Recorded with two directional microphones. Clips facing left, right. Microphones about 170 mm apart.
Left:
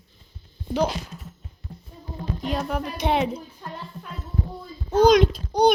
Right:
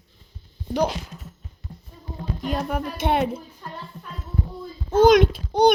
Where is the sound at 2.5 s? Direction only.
50° right (ahead or behind).